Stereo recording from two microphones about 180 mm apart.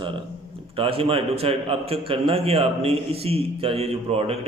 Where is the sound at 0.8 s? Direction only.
30° right (ahead or behind).